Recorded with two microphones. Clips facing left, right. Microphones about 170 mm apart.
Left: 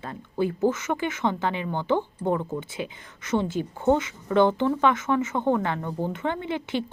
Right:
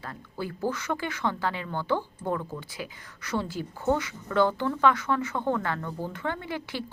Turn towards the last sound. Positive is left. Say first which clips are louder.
# left 6 dB
turn(degrees=20)  # may be behind; listen again after turning